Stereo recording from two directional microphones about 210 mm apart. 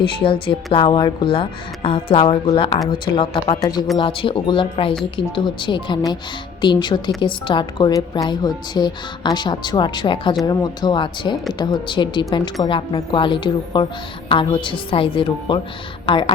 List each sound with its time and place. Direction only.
0.0 s speech: 25° left (ahead or behind)